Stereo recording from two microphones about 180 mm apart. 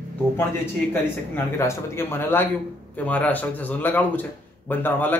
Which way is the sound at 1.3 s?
15° left (ahead or behind).